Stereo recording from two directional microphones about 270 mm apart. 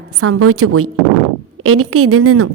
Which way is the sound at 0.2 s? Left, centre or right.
Right.